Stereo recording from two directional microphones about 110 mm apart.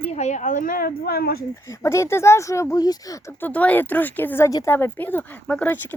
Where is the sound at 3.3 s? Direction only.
15° left (ahead or behind).